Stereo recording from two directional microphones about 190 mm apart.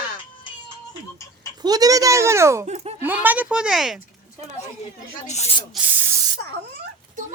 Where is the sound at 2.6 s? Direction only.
35° right (ahead or behind).